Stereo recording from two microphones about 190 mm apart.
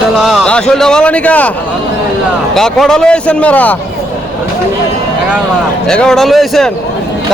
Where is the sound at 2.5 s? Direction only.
Centre (ahead or behind).